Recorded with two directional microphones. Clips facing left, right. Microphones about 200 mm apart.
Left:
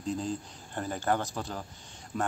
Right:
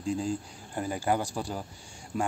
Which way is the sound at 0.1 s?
10° right (ahead or behind).